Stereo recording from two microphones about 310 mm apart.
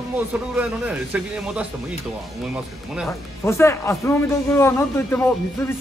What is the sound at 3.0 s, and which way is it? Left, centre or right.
Speech, centre.